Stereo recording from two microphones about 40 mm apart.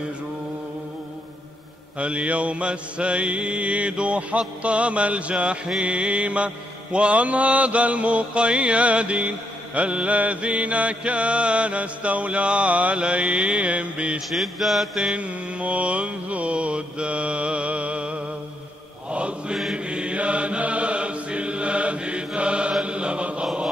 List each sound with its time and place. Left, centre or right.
2.0 s mantra: right
14.3 s mantra: centre
15.1 s mantra: right